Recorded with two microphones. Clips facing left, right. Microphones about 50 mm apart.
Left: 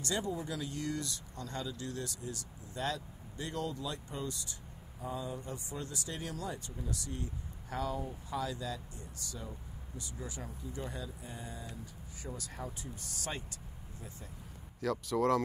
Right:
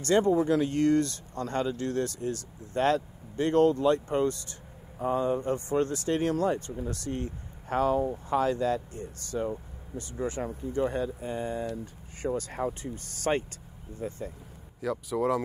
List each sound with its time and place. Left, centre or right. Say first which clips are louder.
0.0 s speech: right 13 dB; right
14.8 s speech: right 3 dB; centre